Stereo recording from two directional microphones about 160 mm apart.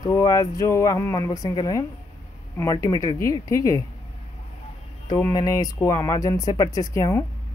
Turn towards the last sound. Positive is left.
turn(degrees=20)  # may be behind; listen again after turning